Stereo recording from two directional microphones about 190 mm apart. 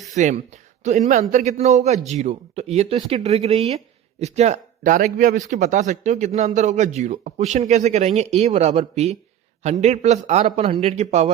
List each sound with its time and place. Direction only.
0.1 s speech: 40° right (ahead or behind)